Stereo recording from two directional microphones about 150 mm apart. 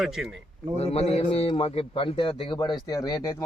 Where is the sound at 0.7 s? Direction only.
45° left (ahead or behind).